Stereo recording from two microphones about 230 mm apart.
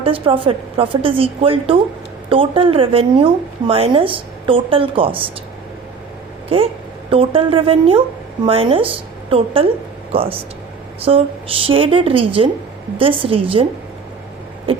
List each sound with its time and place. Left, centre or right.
0.0 s a woman's voice: right
7.1 s a woman's voice: right